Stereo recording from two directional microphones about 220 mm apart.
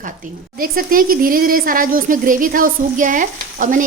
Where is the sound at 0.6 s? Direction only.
40° right (ahead or behind).